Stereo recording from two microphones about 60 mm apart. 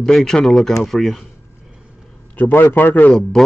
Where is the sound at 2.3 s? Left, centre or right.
Left.